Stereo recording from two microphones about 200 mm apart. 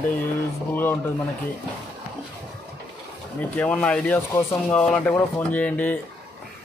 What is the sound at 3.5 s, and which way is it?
Speech, 5° left (ahead or behind).